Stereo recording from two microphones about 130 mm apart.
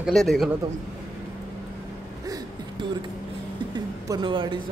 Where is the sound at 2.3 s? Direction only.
35° right (ahead or behind).